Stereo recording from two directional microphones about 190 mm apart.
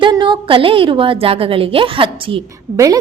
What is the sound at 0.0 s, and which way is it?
A woman's voice, 25° right (ahead or behind).